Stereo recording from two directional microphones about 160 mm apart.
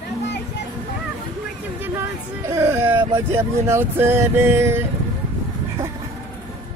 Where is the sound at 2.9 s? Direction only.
20° right (ahead or behind).